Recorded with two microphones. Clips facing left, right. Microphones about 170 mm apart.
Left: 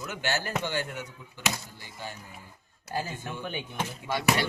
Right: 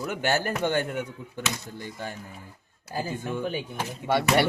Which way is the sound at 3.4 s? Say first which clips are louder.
Right 4 dB; 40° right (ahead or behind).